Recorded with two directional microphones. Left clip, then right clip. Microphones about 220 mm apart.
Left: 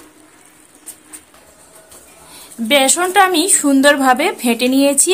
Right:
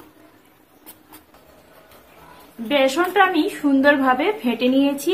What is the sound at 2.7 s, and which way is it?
A woman's voice, 55° left (ahead or behind).